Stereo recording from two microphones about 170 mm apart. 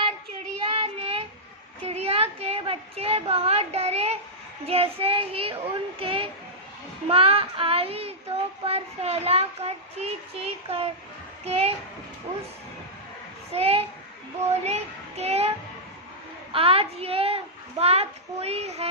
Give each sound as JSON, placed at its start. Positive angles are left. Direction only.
{"t": 0.7, "sound": "child singing", "side_deg": -35}
{"t": 1.8, "sound": "a woman's voice", "side_deg": -35}
{"t": 4.6, "sound": "child singing", "side_deg": -35}
{"t": 13.5, "sound": "child singing", "side_deg": -35}